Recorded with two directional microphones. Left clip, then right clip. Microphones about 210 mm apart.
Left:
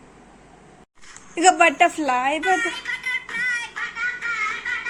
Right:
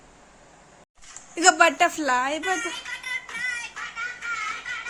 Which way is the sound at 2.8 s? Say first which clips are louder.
Left 5 dB; 25° left (ahead or behind).